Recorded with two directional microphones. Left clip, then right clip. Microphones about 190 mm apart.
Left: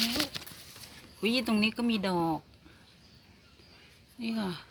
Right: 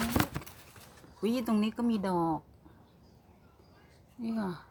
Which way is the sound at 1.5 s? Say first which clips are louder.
Left 2 dB; centre (ahead or behind).